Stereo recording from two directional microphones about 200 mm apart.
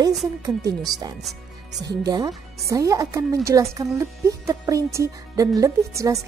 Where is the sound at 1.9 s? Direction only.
20° right (ahead or behind).